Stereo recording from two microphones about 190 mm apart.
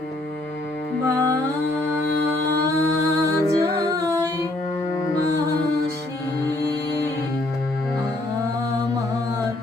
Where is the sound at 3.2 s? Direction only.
15° right (ahead or behind).